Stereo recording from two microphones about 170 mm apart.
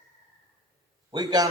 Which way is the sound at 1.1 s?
20° right (ahead or behind).